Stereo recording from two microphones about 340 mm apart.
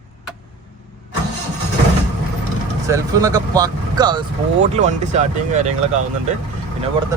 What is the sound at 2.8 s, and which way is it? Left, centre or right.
Speech, centre.